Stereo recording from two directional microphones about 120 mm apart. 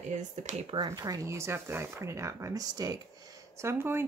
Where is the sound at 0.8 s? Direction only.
30° right (ahead or behind).